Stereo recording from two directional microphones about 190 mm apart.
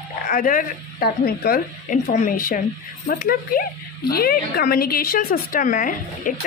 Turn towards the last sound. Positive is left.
turn(degrees=45)  # may be behind; listen again after turning